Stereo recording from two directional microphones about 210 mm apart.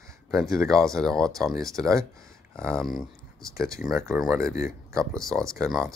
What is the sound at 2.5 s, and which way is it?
Speech, 5° left (ahead or behind).